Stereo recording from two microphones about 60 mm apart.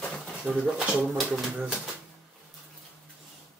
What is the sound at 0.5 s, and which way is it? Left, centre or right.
Speech, centre.